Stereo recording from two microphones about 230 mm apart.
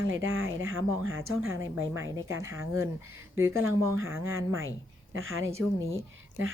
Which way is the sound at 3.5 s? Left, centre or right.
Right.